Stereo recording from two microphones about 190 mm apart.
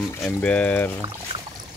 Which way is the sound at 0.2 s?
5° left (ahead or behind).